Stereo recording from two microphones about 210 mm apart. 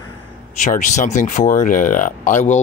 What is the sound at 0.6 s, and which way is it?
Speech, 35° left (ahead or behind).